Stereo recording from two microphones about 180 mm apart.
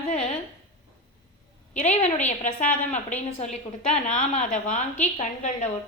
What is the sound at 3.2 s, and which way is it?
A woman's voice, 40° left (ahead or behind).